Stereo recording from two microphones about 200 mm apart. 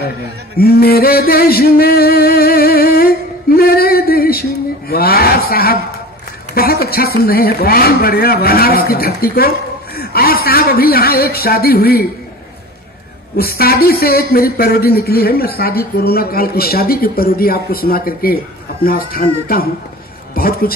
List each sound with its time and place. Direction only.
0.6 s speech: 50° left (ahead or behind)
3.5 s male singing: 50° left (ahead or behind)
6.5 s a man's voice: 50° left (ahead or behind)
13.4 s speech: 50° left (ahead or behind)